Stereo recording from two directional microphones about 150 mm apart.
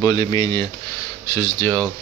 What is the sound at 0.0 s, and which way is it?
Speech, 25° left (ahead or behind).